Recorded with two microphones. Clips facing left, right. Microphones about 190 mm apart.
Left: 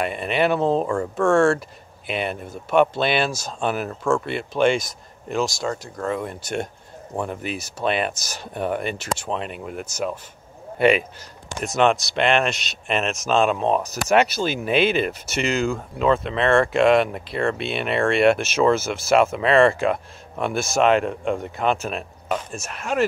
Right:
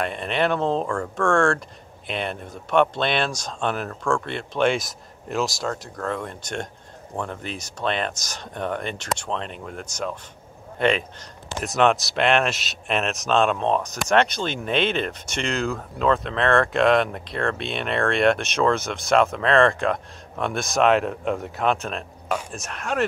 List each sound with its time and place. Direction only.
0.0 s speech: 5° left (ahead or behind)
0.8 s speech: 15° left (ahead or behind)
1.1 s speech: 5° left (ahead or behind)